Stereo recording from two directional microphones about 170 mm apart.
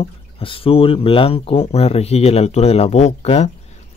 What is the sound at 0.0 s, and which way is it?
Speech, 30° left (ahead or behind).